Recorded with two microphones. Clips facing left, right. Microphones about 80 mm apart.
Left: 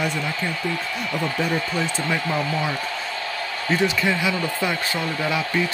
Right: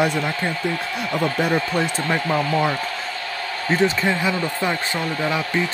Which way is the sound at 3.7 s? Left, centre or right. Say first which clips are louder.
Right 2 dB; right.